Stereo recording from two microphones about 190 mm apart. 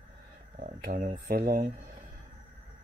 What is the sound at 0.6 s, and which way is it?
Speech, 45° right (ahead or behind).